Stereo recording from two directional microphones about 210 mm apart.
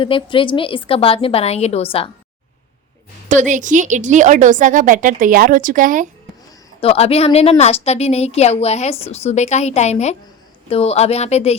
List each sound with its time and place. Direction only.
0.0 s a woman's voice: 25° left (ahead or behind)
3.2 s a woman's voice: 35° right (ahead or behind)
6.7 s a woman's voice: 30° left (ahead or behind)